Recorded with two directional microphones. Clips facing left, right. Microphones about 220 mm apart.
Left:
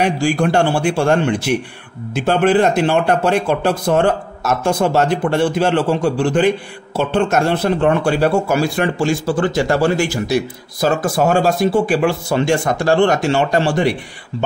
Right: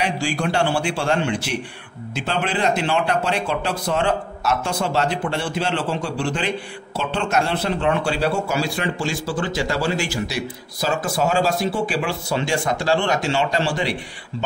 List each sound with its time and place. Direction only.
0.0 s speech: 50° left (ahead or behind)